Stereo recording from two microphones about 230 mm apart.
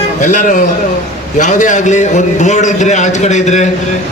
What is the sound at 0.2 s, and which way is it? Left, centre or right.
A man's voice, left.